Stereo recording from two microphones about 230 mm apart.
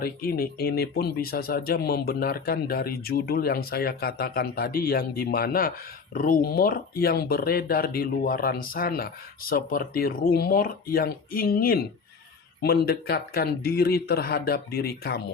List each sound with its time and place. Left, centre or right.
0.0 s speech: left